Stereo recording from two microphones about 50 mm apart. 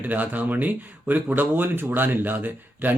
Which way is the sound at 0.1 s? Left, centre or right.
Right.